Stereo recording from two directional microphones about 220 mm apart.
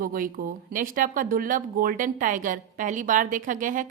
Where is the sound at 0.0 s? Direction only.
40° right (ahead or behind).